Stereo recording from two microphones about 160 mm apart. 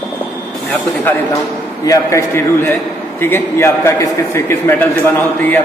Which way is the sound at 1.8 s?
20° left (ahead or behind).